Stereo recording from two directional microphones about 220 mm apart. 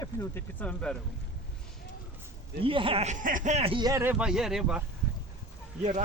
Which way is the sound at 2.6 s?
25° right (ahead or behind).